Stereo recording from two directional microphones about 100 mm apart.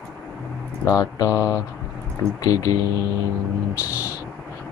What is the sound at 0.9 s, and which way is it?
Speech, 35° left (ahead or behind).